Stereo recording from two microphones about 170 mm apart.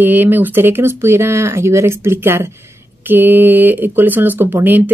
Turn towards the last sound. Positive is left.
turn(degrees=-10)  # may be behind; listen again after turning